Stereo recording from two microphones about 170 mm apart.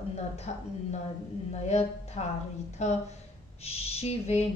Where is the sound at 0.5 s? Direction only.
45° left (ahead or behind).